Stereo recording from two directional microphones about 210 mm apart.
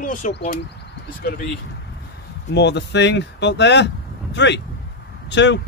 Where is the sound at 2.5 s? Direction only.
55° left (ahead or behind).